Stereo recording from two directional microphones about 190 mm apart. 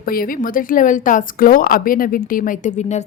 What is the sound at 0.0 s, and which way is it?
A woman's voice, 50° left (ahead or behind).